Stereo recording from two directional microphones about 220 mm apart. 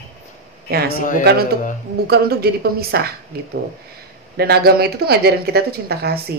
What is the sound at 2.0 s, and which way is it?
Speech, 45° right (ahead or behind).